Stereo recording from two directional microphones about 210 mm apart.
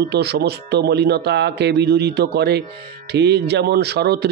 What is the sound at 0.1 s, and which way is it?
Speech, 50° right (ahead or behind).